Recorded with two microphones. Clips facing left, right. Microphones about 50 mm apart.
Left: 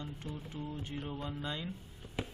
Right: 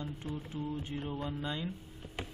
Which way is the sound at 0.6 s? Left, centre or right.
Centre.